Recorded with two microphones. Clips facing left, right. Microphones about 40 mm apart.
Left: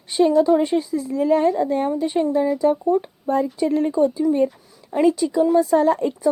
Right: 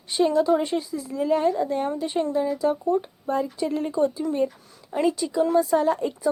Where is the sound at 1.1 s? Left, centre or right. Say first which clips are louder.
Left 4 dB; left.